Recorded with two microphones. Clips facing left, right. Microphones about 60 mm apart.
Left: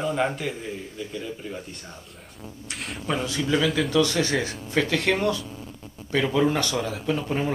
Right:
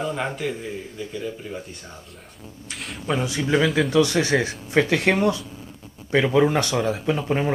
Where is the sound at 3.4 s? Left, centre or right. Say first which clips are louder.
Right 3 dB; right.